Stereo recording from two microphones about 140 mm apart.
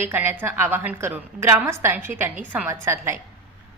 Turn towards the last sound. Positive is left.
turn(degrees=-20)  # may be behind; listen again after turning